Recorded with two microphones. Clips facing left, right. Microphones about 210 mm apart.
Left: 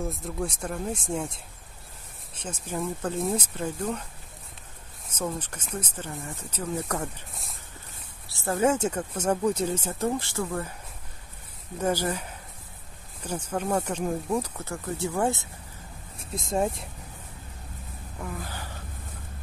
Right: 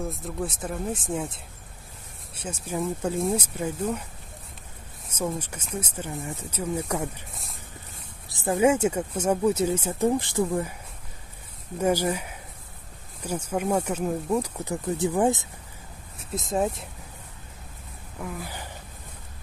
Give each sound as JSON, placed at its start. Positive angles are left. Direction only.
{"t": 0.0, "sound": "speech", "side_deg": 0}
{"t": 2.3, "sound": "speech", "side_deg": -10}
{"t": 5.1, "sound": "speech", "side_deg": -10}
{"t": 8.3, "sound": "speech", "side_deg": -15}
{"t": 11.8, "sound": "speech", "side_deg": -10}
{"t": 14.6, "sound": "speech", "side_deg": -15}
{"t": 16.3, "sound": "speech", "side_deg": 0}
{"t": 18.2, "sound": "speech", "side_deg": -15}